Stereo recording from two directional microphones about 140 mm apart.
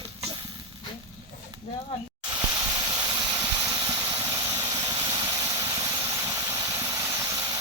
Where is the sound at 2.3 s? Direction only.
25° right (ahead or behind).